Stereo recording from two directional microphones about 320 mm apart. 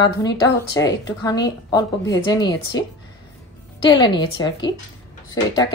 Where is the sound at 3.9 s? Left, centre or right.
Centre.